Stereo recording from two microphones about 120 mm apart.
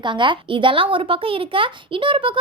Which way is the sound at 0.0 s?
40° right (ahead or behind).